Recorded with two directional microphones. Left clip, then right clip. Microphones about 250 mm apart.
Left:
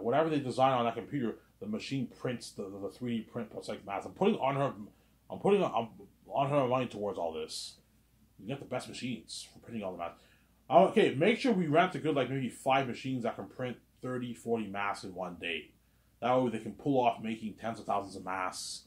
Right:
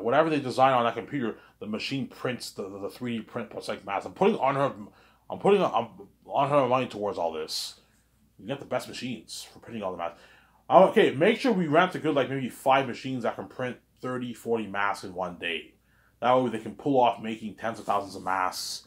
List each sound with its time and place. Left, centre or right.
0.0 s speech: centre